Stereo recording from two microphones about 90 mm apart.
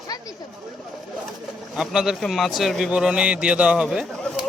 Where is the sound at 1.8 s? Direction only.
5° right (ahead or behind).